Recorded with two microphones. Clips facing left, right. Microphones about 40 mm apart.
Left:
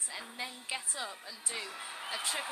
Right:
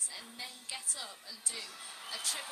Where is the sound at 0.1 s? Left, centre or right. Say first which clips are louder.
Left 5 dB; left.